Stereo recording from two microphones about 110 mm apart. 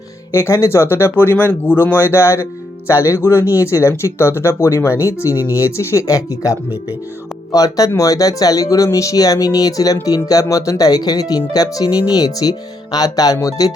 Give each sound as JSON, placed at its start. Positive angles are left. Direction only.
{"t": 0.3, "sound": "speech", "side_deg": 25}